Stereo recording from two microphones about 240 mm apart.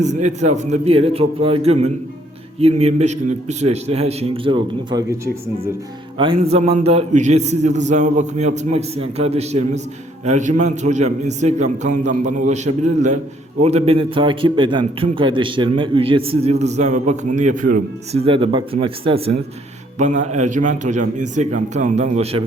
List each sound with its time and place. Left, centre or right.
0.0 s a man's voice: right
6.4 s a man's voice: right